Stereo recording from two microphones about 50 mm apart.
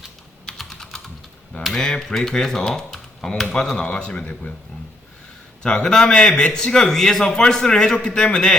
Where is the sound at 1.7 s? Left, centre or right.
Centre.